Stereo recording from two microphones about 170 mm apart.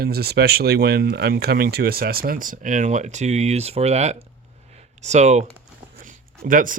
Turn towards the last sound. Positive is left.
turn(degrees=-55)  # may be behind; listen again after turning